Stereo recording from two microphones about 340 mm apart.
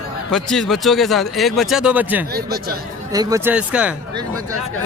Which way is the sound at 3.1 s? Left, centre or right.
Centre.